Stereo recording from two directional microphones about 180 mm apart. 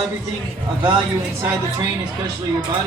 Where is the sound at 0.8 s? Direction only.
25° right (ahead or behind).